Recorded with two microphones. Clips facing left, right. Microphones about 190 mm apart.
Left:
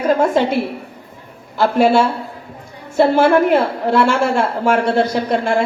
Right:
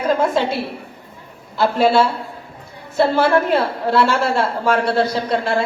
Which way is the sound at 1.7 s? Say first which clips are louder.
Left 2 dB; 15° left (ahead or behind).